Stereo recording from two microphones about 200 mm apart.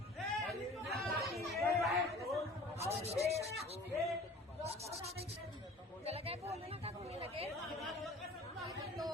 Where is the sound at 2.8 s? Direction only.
30° right (ahead or behind).